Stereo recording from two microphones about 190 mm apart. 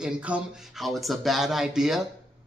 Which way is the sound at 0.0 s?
5° right (ahead or behind).